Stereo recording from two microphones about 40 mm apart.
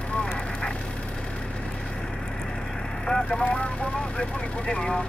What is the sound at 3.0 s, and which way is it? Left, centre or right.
Vehicle, centre.